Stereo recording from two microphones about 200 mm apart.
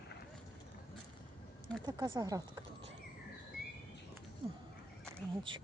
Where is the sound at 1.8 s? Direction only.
20° right (ahead or behind).